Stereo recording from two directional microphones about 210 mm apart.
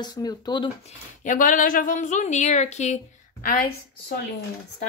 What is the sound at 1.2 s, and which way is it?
A woman's voice, 40° left (ahead or behind).